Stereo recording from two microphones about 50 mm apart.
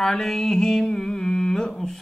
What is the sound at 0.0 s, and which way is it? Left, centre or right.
Mantra, centre.